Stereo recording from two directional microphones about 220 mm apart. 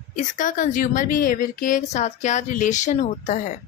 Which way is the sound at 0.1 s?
35° left (ahead or behind).